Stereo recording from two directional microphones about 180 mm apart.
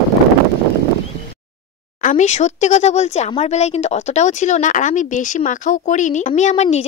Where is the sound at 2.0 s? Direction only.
45° left (ahead or behind).